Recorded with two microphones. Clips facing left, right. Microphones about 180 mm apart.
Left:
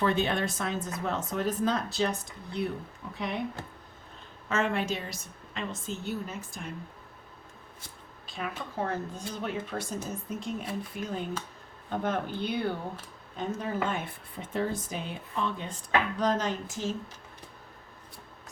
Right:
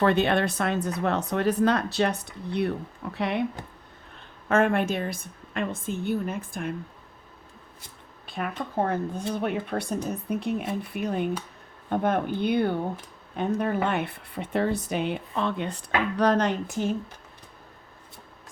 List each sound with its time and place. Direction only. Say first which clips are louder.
0.0 s speech: right 5 dB; 65° right (ahead or behind)
4.4 s speech: right 6 dB; 55° right (ahead or behind)
8.3 s speech: right 5 dB; 55° right (ahead or behind)